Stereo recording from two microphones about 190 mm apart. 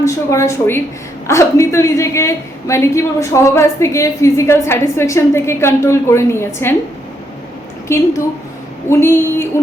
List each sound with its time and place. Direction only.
0.0 s a woman's voice: 15° left (ahead or behind)
7.9 s a woman's voice: 15° left (ahead or behind)